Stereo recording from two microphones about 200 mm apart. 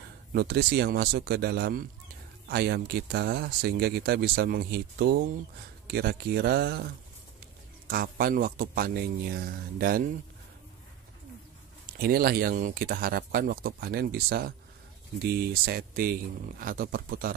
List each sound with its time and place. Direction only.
0.3 s speech: 50° right (ahead or behind)
7.9 s speech: 45° right (ahead or behind)
12.0 s speech: 50° right (ahead or behind)